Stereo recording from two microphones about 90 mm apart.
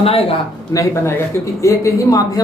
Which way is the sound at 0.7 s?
35° left (ahead or behind).